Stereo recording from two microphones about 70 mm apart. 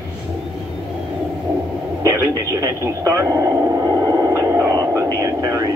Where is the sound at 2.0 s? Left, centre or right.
Right.